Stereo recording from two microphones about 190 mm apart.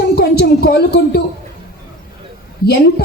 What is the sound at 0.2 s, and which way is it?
A woman's voice, 60° left (ahead or behind).